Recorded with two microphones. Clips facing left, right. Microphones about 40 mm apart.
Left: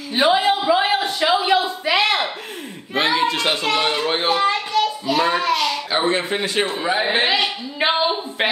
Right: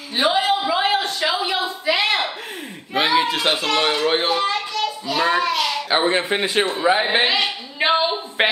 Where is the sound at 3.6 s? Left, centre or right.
Centre.